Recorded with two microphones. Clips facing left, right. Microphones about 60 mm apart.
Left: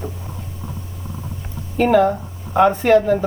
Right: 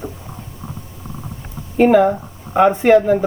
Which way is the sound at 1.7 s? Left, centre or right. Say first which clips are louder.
Right 3 dB; centre.